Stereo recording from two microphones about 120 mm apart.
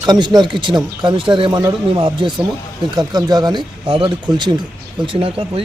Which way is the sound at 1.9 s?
45° right (ahead or behind).